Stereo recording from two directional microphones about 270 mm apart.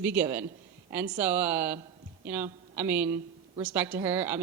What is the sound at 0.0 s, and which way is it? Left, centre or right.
A man's voice, centre.